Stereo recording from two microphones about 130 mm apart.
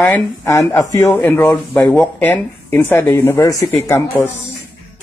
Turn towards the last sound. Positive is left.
turn(degrees=15)  # may be behind; listen again after turning